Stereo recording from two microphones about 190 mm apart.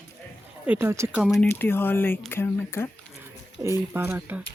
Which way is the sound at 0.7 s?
10° right (ahead or behind).